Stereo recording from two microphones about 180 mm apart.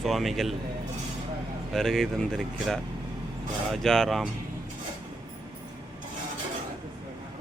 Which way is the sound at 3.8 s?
Centre (ahead or behind).